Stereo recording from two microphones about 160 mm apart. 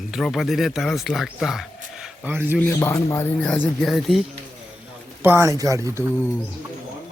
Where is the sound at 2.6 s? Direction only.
15° left (ahead or behind).